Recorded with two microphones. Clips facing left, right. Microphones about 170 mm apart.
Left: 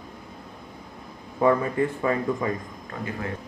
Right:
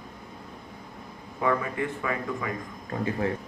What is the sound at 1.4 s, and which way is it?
Speech, 35° left (ahead or behind).